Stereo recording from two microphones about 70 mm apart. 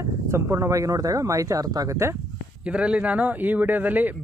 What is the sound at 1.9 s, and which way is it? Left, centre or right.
Speech, right.